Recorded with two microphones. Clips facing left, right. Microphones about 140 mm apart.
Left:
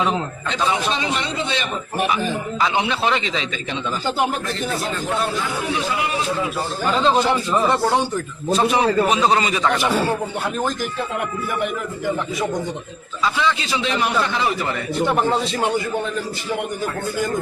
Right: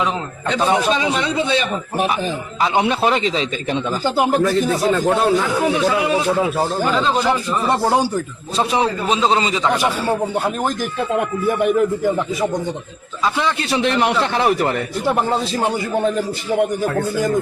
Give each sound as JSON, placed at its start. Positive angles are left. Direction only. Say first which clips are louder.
{"t": 0.6, "sound": "a man's voice", "louder": "right 4 dB", "side_deg": -50}
{"t": 2.6, "sound": "a man's voice", "louder": "right 5 dB", "side_deg": -45}
{"t": 5.0, "sound": "a man's voice", "louder": "right 7 dB", "side_deg": -65}
{"t": 9.0, "sound": "speech", "louder": "right 1 dB", "side_deg": -25}
{"t": 13.4, "sound": "a man's voice", "louder": "right 4 dB", "side_deg": -55}